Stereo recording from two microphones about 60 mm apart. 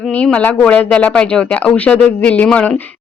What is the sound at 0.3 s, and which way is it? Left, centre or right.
A woman's voice, centre.